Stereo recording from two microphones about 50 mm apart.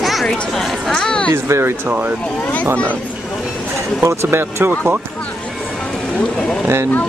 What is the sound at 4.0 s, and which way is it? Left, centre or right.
Speech, right.